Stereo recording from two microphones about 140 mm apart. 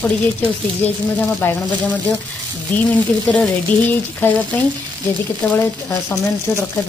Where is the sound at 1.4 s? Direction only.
15° left (ahead or behind).